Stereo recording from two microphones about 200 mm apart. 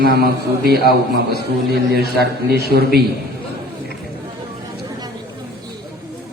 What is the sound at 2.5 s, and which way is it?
Speech, 50° right (ahead or behind).